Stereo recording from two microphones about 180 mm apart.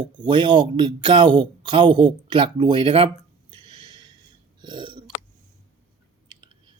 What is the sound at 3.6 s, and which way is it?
Snort, 25° right (ahead or behind).